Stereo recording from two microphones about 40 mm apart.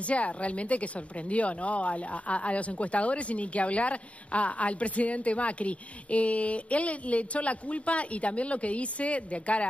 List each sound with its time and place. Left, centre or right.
0.0 s speech: left